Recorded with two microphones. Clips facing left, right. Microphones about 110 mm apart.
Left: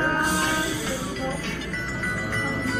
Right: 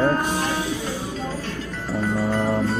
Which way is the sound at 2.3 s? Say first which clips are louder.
Right 6 dB; 40° right (ahead or behind).